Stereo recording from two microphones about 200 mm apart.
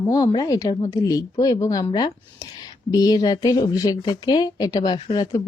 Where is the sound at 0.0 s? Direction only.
15° left (ahead or behind).